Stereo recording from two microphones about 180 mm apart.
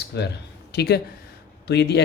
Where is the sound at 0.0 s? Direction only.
65° left (ahead or behind).